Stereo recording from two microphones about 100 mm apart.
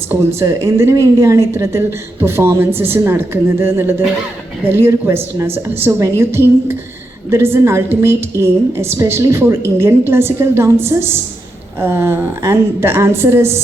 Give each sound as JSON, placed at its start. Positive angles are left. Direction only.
{"t": 0.3, "sound": "a woman's voice", "side_deg": -25}